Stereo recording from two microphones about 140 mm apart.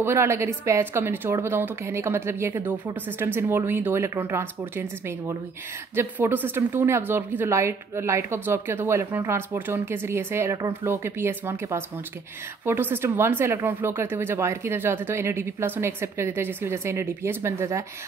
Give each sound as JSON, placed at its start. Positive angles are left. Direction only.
{"t": 0.0, "sound": "speech", "side_deg": -20}